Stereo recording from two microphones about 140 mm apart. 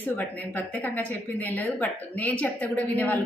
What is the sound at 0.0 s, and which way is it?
A woman's voice, 10° left (ahead or behind).